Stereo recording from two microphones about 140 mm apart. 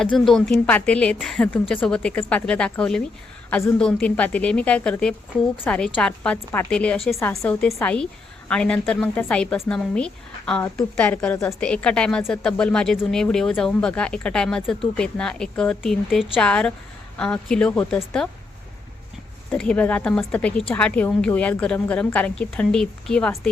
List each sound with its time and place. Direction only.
0.0 s a woman's voice: 5° left (ahead or behind)
3.5 s a woman's voice: 20° left (ahead or behind)
3.8 s a woman's voice: 5° left (ahead or behind)
19.5 s a woman's voice: 10° left (ahead or behind)